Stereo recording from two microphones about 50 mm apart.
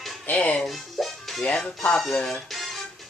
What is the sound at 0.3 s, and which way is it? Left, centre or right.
Speech, left.